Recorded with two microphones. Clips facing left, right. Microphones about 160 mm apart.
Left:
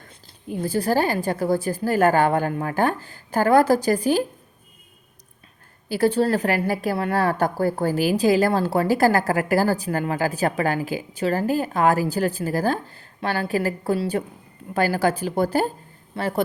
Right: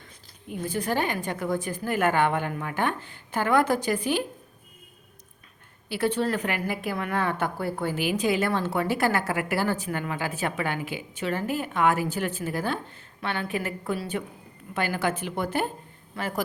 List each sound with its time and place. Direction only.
0.4 s a woman's voice: 35° left (ahead or behind)
5.9 s a woman's voice: 35° left (ahead or behind)